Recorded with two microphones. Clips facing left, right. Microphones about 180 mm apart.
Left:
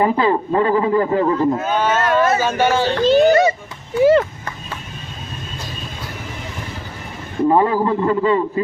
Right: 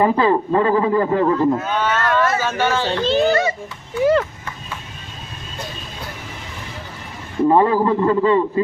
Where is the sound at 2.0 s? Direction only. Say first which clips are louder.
Left 3 dB; 15° left (ahead or behind).